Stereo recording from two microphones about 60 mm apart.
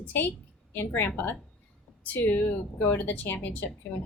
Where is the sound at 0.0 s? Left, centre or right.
Left.